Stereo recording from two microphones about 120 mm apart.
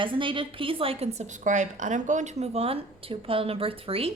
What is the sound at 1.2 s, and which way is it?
Speech, 90° right.